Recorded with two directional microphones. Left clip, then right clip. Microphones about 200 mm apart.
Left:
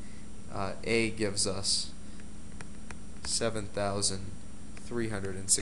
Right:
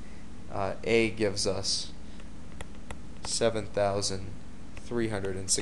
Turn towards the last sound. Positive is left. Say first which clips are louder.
# right 2 dB
turn(degrees=-20)  # may be behind; listen again after turning